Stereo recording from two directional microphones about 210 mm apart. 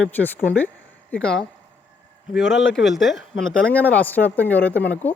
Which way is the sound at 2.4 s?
60° left (ahead or behind).